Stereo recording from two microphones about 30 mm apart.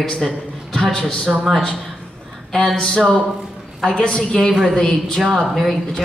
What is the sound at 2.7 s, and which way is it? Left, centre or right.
A woman's voice, centre.